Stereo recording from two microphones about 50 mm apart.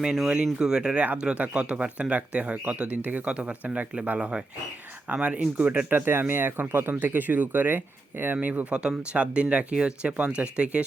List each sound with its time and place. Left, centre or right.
0.0 s speech: centre
5.1 s speech: right
6.3 s speech: right
8.7 s speech: right